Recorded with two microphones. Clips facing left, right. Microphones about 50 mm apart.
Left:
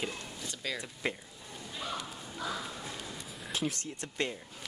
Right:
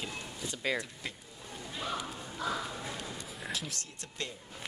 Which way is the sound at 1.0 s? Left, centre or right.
Left.